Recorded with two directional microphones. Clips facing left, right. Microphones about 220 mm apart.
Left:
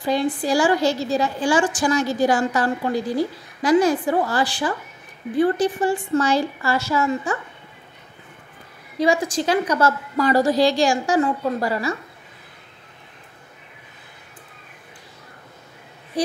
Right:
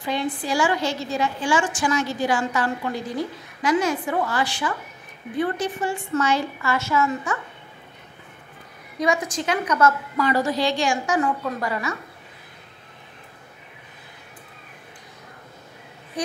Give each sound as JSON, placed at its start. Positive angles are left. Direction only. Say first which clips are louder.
{"t": 0.0, "sound": "a woman's voice", "louder": "left 5 dB", "side_deg": 40}
{"t": 8.9, "sound": "a woman's voice", "louder": "left 4 dB", "side_deg": 30}